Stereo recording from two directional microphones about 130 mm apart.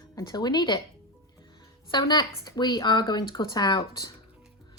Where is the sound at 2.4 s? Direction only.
35° left (ahead or behind).